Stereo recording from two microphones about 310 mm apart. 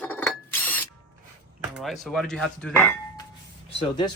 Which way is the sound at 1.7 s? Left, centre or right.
Centre.